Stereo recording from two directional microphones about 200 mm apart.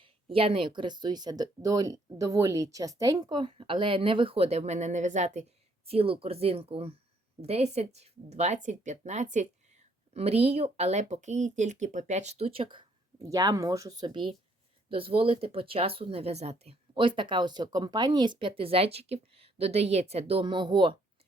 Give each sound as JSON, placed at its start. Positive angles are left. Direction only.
{"t": 0.0, "sound": "speech", "side_deg": -25}